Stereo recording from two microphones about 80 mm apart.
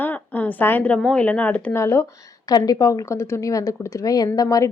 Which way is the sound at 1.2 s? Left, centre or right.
Centre.